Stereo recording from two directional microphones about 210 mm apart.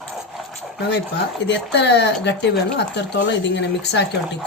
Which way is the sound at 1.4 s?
55° left (ahead or behind).